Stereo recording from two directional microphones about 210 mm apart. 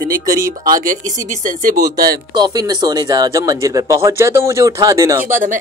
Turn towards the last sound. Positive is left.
turn(degrees=-40)  # may be behind; listen again after turning